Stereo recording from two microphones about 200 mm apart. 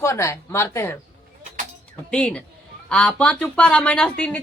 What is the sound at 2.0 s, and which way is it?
A woman's voice, 5° left (ahead or behind).